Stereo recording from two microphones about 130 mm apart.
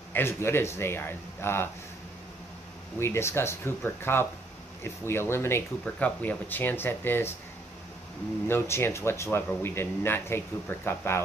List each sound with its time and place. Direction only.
0.1 s speech: 20° left (ahead or behind)
3.0 s speech: 20° left (ahead or behind)
8.5 s speech: 20° left (ahead or behind)